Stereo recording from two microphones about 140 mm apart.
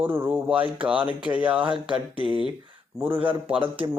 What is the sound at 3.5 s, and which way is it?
Speech, 40° right (ahead or behind).